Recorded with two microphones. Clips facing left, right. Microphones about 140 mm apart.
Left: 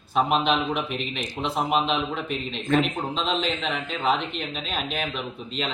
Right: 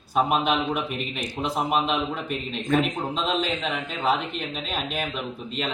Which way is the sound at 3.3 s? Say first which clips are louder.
Right 1 dB; 5° right (ahead or behind).